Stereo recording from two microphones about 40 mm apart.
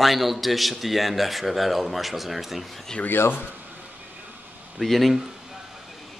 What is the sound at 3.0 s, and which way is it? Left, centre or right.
Speech, left.